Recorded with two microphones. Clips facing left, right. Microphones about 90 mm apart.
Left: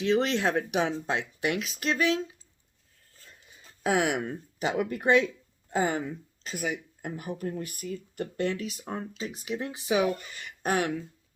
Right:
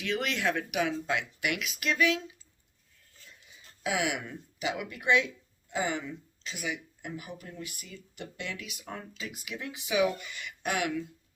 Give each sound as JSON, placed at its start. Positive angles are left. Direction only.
{"t": 0.0, "sound": "speech", "side_deg": 30}
{"t": 3.8, "sound": "speech", "side_deg": 45}